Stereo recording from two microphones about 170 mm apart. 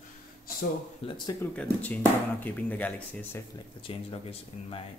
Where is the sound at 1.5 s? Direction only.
10° left (ahead or behind).